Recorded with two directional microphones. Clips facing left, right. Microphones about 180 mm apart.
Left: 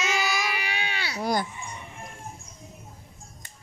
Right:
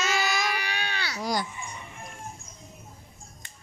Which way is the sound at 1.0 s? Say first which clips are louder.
Left 2 dB; 25° left (ahead or behind).